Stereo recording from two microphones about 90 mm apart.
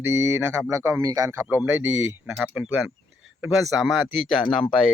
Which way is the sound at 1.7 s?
20° right (ahead or behind).